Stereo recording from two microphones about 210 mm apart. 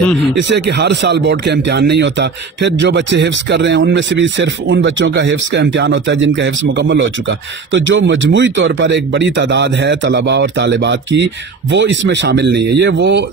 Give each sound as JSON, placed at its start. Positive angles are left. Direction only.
{"t": 0.4, "sound": "speech", "side_deg": -55}